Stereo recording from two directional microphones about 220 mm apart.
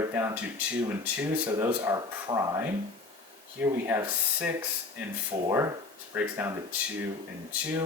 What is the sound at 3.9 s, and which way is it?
Speech, 10° right (ahead or behind).